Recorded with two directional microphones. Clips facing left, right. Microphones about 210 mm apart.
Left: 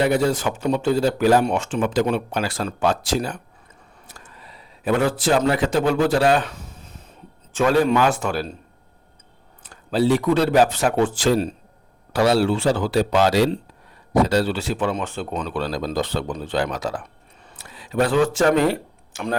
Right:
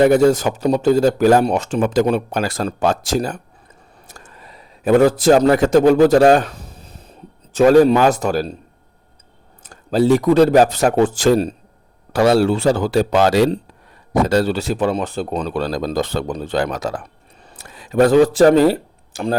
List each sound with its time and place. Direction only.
0.0 s a man's voice: 45° right (ahead or behind)
9.6 s speech: 45° right (ahead or behind)